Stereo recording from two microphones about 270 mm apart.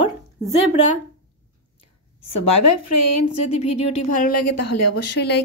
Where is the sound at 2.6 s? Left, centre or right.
Left.